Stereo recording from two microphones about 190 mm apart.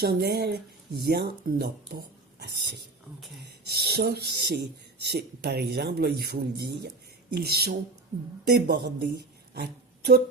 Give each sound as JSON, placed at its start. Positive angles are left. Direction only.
{"t": 0.0, "sound": "speech", "side_deg": -55}